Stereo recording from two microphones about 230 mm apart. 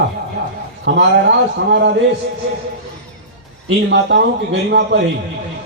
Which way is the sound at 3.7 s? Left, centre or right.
Right.